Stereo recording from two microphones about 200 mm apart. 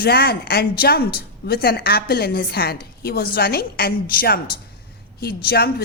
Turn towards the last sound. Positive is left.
turn(degrees=50)  # may be behind; listen again after turning